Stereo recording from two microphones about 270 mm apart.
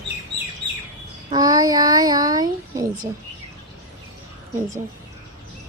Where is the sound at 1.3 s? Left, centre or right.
Centre.